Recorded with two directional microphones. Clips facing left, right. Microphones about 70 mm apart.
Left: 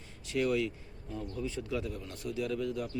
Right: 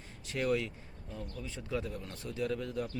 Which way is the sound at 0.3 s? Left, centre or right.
Right.